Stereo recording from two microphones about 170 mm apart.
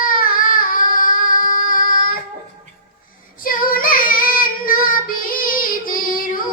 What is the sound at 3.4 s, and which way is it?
Child singing, 55° left (ahead or behind).